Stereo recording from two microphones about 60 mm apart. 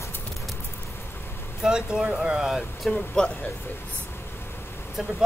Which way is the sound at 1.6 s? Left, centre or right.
Centre.